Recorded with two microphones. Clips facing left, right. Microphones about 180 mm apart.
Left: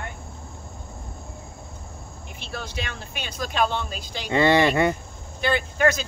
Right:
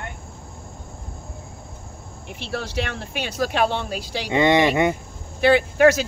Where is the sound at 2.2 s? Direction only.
75° right (ahead or behind).